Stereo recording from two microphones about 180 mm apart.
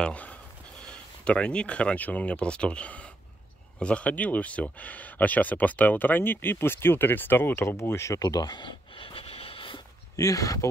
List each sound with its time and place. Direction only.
0.0 s speech: 5° left (ahead or behind); by 9.8 s 30° left (ahead or behind)
10.1 s speech: 20° left (ahead or behind)